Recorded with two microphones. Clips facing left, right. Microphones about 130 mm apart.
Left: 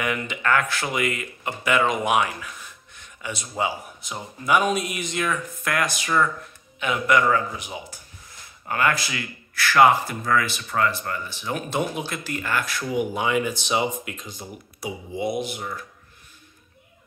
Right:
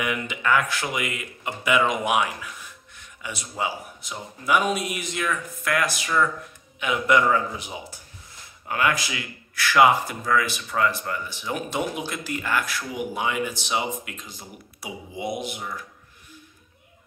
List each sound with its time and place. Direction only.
0.0 s speech: 10° right (ahead or behind)
6.8 s a man's voice: 20° right (ahead or behind)
8.6 s speech: 10° right (ahead or behind)
14.8 s speech: 15° right (ahead or behind)